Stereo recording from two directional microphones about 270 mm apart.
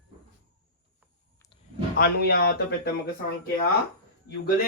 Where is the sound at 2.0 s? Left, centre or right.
Left.